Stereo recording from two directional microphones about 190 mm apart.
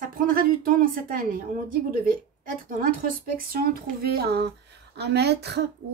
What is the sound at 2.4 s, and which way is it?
A woman's voice, 45° right (ahead or behind).